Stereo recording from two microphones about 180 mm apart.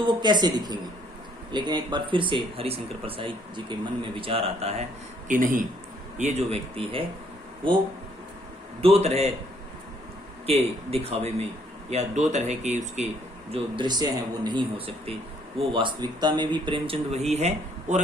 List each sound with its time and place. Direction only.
0.0 s speech: 25° right (ahead or behind)
5.3 s speech: 45° right (ahead or behind); by 7.0 s 30° right (ahead or behind)
8.8 s speech: 35° right (ahead or behind)
10.4 s speech: 35° right (ahead or behind)
13.5 s speech: 25° right (ahead or behind)